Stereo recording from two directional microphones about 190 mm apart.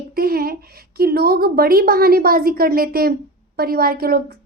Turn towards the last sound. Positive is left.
turn(degrees=-55)  # may be behind; listen again after turning